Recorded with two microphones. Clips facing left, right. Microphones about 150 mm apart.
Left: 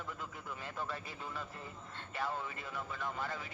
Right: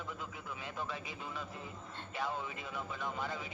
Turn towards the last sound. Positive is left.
turn(degrees=0)  # may be behind; listen again after turning